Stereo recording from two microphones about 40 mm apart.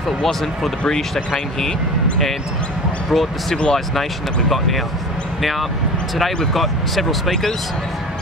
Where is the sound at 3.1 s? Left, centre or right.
Centre.